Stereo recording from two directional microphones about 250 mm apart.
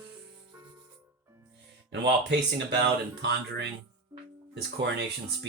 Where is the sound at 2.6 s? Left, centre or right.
Right.